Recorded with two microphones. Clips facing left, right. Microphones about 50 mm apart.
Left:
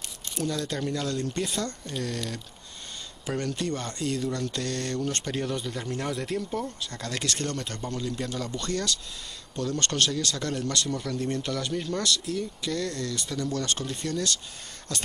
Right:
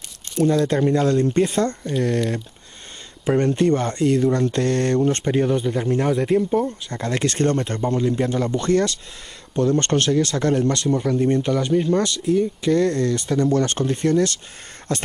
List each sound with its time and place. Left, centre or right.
0.4 s speech: right